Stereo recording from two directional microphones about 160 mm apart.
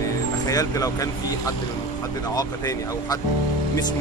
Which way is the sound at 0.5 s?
20° left (ahead or behind).